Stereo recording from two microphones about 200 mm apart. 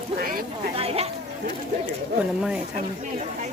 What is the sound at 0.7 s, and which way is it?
Insect, 30° right (ahead or behind).